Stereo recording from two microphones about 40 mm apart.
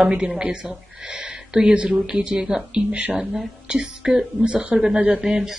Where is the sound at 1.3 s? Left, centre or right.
Centre.